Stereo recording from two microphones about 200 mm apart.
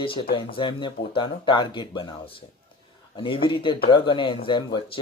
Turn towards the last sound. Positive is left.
turn(degrees=25)  # may be behind; listen again after turning